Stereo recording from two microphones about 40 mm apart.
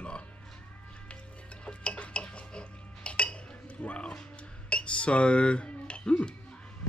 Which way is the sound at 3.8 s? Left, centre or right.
Left.